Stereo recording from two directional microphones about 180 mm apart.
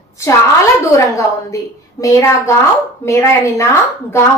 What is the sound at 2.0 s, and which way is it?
A woman's voice, 15° left (ahead or behind).